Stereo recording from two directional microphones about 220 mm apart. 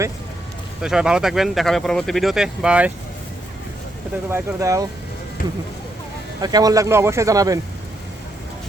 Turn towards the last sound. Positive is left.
turn(degrees=-15)  # may be behind; listen again after turning